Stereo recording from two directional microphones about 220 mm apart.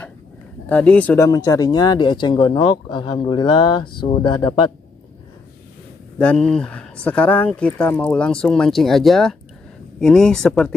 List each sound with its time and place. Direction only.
0.7 s speech: 5° left (ahead or behind)
6.1 s speech: 5° left (ahead or behind)